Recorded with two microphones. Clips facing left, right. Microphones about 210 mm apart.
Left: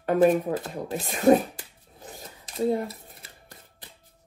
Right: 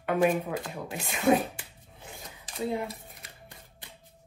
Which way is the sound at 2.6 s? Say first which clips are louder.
Left 6 dB; 40° left (ahead or behind).